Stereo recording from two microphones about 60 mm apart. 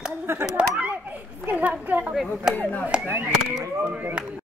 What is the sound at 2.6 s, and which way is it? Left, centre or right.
Speech, left.